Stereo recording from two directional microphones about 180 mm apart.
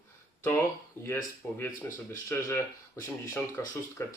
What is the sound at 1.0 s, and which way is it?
Speech, 15° left (ahead or behind).